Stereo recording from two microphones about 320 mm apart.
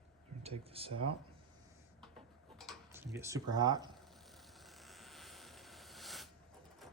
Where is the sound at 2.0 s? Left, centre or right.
Centre.